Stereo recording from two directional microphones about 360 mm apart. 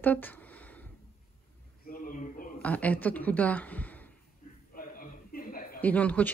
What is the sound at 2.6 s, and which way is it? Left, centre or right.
Speech, centre.